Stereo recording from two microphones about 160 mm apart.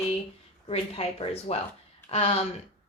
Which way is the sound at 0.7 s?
40° left (ahead or behind).